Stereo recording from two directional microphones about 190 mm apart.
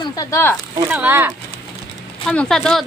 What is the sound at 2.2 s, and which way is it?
Speech, 5° left (ahead or behind).